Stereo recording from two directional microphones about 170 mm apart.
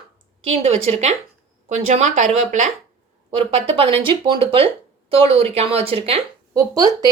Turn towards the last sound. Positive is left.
turn(degrees=-20)  # may be behind; listen again after turning